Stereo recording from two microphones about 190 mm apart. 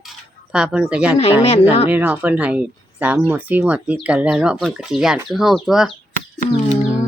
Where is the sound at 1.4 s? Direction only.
35° left (ahead or behind).